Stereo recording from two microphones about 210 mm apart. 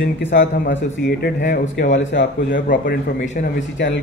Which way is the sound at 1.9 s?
60° left (ahead or behind).